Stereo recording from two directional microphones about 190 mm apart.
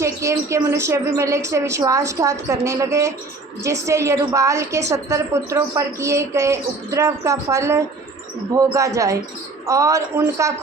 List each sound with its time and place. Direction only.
0.0 s a woman's voice: 15° right (ahead or behind)